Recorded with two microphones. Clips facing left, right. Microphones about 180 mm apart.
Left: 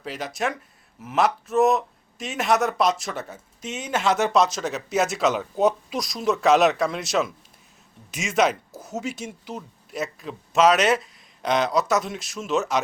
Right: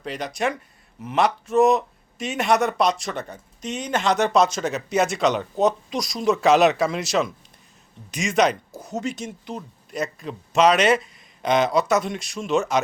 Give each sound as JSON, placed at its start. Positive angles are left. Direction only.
{"t": 0.0, "sound": "speech", "side_deg": 5}